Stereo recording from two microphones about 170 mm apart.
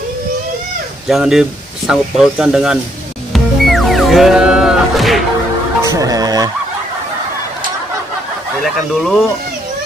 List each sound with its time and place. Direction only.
1.0 s speech: centre (ahead or behind)
3.3 s music: centre (ahead or behind)
5.9 s speech: 20° right (ahead or behind)
8.6 s speech: centre (ahead or behind)